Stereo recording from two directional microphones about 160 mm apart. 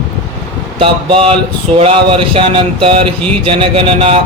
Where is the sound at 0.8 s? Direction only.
35° right (ahead or behind).